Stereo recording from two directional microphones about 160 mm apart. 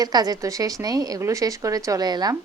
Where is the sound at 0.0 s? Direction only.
25° right (ahead or behind).